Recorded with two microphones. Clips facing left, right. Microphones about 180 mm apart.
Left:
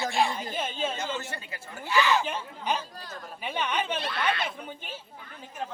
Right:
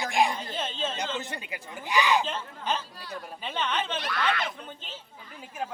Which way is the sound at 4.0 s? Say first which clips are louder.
Even; 25° left (ahead or behind).